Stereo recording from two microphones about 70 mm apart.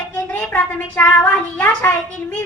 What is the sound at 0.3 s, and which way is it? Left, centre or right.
A woman's voice, left.